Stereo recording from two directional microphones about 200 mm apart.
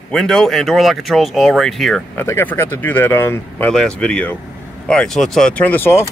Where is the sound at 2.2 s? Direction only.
10° left (ahead or behind).